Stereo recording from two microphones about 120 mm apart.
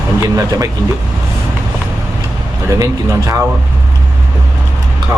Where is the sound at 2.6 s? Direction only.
25° right (ahead or behind).